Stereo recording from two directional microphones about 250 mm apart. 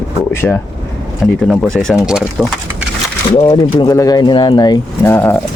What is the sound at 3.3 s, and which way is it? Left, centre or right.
Speech, left.